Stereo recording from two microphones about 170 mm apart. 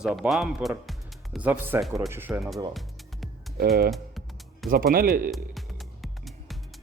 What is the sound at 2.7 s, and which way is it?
Music, centre (ahead or behind).